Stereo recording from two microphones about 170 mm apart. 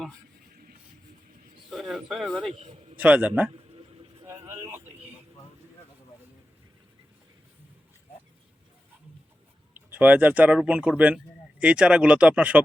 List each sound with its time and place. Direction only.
1.7 s speech: centre (ahead or behind)
2.6 s a man's voice: 40° right (ahead or behind)
3.0 s speech: 10° right (ahead or behind)
4.2 s vehicle: 15° right (ahead or behind)
9.9 s speech: 10° right (ahead or behind)